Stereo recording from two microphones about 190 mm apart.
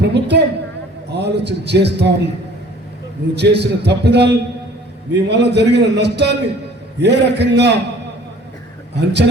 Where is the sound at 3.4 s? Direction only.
60° right (ahead or behind).